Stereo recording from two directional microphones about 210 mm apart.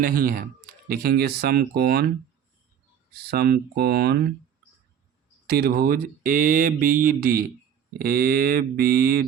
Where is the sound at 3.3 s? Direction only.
50° right (ahead or behind).